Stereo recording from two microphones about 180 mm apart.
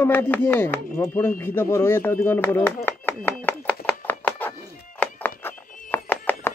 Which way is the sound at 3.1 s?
10° left (ahead or behind).